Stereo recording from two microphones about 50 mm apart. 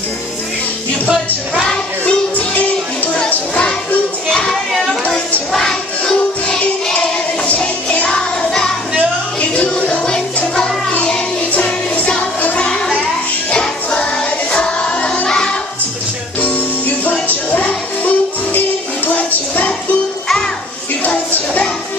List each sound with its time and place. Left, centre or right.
2.0 s music: left
5.0 s a sound: left
5.5 s music: centre; by 8.1 s left
8.1 s music: centre
9.4 s music: left
11.5 s music: left
12.6 s a sound: centre
13.5 s music: centre
16.3 s music: left
21.0 s a sound: left